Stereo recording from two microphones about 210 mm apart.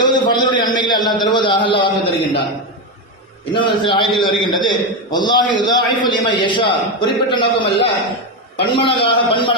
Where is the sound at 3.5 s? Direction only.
25° left (ahead or behind).